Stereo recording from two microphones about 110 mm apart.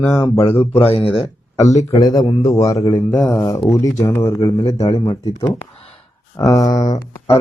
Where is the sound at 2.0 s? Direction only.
35° left (ahead or behind).